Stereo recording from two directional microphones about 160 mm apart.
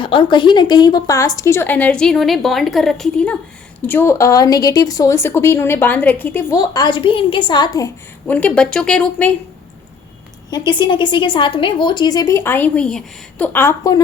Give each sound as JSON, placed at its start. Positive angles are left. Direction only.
{"t": 0.0, "sound": "a woman's voice", "side_deg": 30}
{"t": 8.3, "sound": "speech", "side_deg": 10}
{"t": 10.7, "sound": "a woman's voice", "side_deg": 30}
{"t": 13.5, "sound": "speech", "side_deg": 15}